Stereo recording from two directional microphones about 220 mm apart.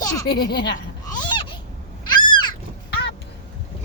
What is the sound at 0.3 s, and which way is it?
Speech, 50° left (ahead or behind).